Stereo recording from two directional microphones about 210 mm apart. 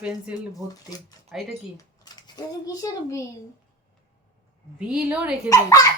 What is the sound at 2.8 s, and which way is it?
Babbling, 15° left (ahead or behind).